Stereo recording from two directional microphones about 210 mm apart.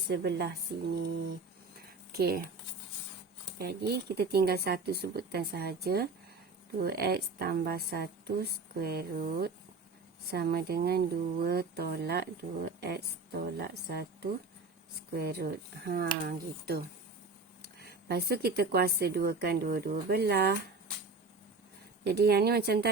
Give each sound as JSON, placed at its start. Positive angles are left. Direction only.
{"t": 0.1, "sound": "speech", "side_deg": -50}
{"t": 2.1, "sound": "speech", "side_deg": -45}
{"t": 3.6, "sound": "speech", "side_deg": -50}
{"t": 22.0, "sound": "speech", "side_deg": -50}